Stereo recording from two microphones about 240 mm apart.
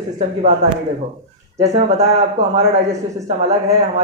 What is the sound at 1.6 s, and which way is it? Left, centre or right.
Speech, right.